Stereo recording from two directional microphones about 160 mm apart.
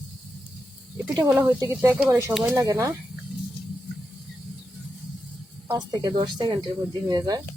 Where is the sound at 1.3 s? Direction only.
10° right (ahead or behind).